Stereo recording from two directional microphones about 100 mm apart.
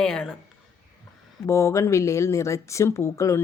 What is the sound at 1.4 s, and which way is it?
Speech, 30° left (ahead or behind).